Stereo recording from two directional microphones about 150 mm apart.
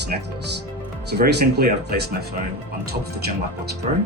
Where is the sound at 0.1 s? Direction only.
70° right (ahead or behind).